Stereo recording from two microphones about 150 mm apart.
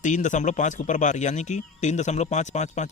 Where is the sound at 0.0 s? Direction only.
55° left (ahead or behind).